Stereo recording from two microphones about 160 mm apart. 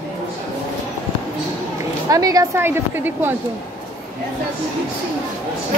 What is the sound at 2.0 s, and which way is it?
A woman's voice, 20° right (ahead or behind).